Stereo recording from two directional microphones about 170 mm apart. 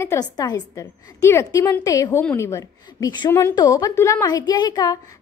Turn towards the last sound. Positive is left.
turn(degrees=25)  # may be behind; listen again after turning